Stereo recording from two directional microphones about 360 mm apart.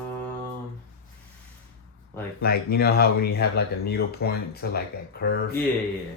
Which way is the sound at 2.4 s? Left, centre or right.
Left.